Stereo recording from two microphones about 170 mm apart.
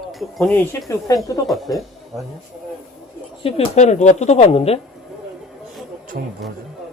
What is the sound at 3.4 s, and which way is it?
Speech, 40° left (ahead or behind).